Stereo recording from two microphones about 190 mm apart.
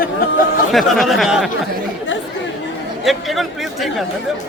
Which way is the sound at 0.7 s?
Centre (ahead or behind).